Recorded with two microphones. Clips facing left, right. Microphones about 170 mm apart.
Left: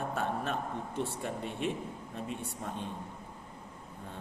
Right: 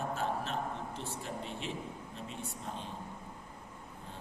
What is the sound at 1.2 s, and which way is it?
Speech, 55° left (ahead or behind).